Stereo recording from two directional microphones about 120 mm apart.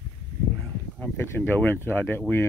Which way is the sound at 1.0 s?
20° left (ahead or behind).